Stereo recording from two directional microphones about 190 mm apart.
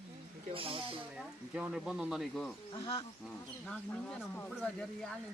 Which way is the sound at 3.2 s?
5° left (ahead or behind).